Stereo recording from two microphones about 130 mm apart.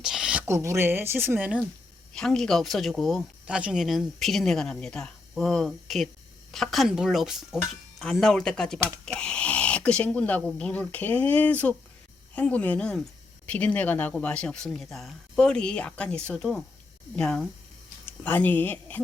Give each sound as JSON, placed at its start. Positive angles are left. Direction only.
{"t": 0.0, "sound": "a sound", "side_deg": -5}
{"t": 0.4, "sound": "speech", "side_deg": -20}
{"t": 2.1, "sound": "speech", "side_deg": 5}